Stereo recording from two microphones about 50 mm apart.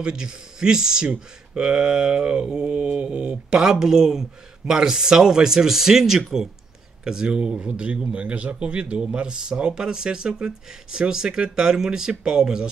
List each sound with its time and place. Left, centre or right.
0.0 s speech: centre
2.4 s mantra: centre
3.8 s speech: centre